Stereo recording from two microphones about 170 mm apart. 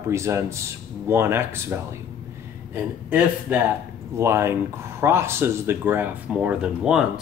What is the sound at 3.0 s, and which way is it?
Speech, 10° right (ahead or behind).